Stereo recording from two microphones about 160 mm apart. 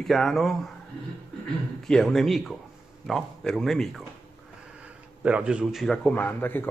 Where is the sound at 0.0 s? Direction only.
Centre (ahead or behind).